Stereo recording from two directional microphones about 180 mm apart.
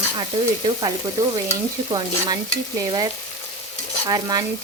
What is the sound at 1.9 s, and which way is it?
Frying, 20° right (ahead or behind).